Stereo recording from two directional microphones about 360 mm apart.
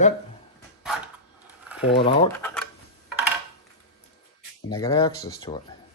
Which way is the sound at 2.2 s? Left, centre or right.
Centre.